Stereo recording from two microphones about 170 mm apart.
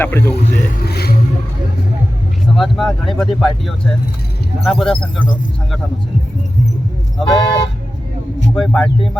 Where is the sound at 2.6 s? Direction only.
Centre (ahead or behind).